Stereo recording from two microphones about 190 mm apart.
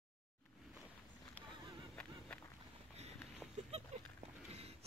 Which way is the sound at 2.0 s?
5° left (ahead or behind).